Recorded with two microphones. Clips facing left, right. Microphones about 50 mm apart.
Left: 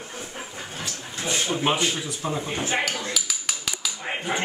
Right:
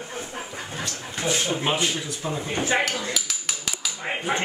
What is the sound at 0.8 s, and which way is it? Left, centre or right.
Dog, centre.